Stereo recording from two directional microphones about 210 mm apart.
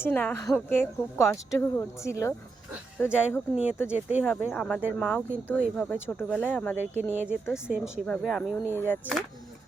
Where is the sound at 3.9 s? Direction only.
5° right (ahead or behind).